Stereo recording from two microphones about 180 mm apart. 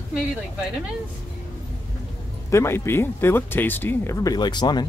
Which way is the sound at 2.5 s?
15° left (ahead or behind).